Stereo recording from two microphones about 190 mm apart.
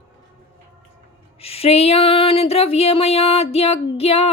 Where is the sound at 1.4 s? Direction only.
30° left (ahead or behind).